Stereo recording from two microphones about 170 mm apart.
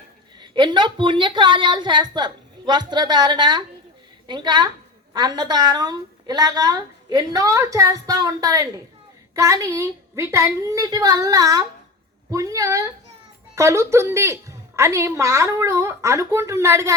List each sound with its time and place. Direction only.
0.3 s a woman's voice: 25° right (ahead or behind)